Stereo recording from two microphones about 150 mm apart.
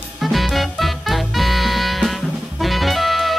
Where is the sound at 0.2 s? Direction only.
Centre (ahead or behind).